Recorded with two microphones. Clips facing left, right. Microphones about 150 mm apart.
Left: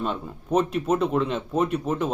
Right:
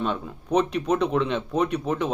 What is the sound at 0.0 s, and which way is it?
Speech, 5° left (ahead or behind).